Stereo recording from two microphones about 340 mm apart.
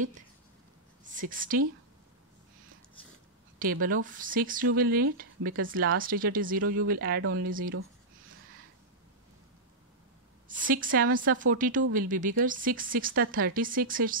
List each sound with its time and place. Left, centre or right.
1.0 s a woman's voice: right
3.8 s speech: right
10.5 s speech: right